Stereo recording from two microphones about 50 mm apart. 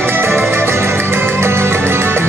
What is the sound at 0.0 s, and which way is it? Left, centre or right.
Music, right.